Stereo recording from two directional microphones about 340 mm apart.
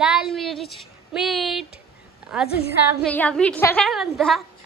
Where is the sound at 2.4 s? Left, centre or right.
Left.